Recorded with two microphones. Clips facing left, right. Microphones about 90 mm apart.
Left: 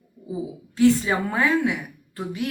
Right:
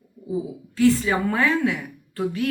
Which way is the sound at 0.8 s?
20° left (ahead or behind).